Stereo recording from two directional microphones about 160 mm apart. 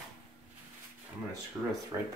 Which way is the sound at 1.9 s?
25° right (ahead or behind).